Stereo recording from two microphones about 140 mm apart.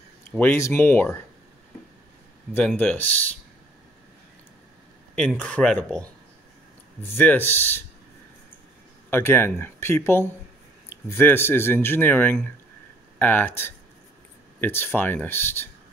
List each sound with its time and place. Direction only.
0.4 s speech: 15° left (ahead or behind)
2.8 s speech: 10° left (ahead or behind)
5.4 s speech: 10° left (ahead or behind)
7.2 s speech: 15° left (ahead or behind)
9.1 s speech: 15° left (ahead or behind)